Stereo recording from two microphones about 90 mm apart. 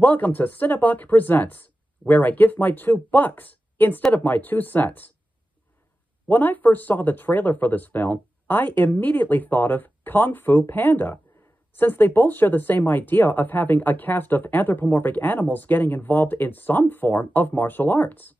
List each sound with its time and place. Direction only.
0.0 s speech: 20° left (ahead or behind)
6.2 s speech: 20° left (ahead or behind)